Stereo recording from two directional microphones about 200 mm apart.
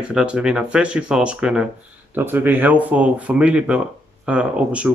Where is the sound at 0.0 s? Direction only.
5° right (ahead or behind).